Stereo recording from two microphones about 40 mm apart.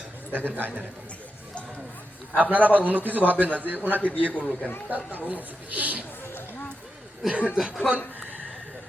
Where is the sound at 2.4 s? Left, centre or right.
Right.